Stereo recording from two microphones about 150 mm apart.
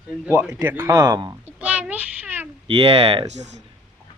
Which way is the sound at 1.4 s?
10° right (ahead or behind).